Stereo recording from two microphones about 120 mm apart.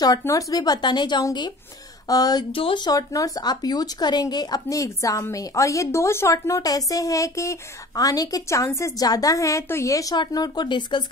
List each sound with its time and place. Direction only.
0.2 s speech: 30° left (ahead or behind)
2.5 s speech: 45° left (ahead or behind)